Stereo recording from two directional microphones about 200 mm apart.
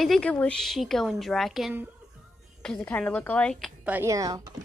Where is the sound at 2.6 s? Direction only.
5° left (ahead or behind).